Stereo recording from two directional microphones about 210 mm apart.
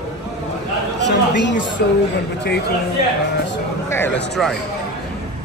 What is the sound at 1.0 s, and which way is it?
Speech, 55° left (ahead or behind).